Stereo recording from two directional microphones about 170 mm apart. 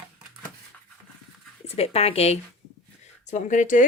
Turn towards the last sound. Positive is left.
turn(degrees=50)  # may be behind; listen again after turning